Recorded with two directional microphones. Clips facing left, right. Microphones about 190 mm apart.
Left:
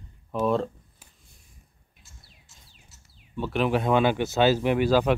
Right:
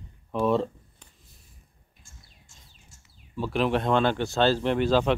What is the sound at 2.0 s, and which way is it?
Bird, 50° right (ahead or behind).